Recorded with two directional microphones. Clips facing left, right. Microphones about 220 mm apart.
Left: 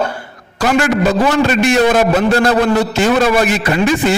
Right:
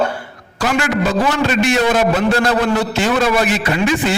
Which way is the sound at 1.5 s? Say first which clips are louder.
Left 3 dB; 45° left (ahead or behind).